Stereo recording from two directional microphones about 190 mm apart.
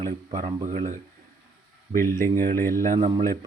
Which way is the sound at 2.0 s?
15° left (ahead or behind).